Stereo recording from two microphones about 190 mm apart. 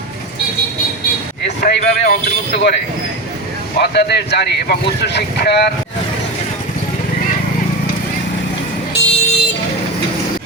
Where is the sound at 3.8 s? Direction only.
60° left (ahead or behind).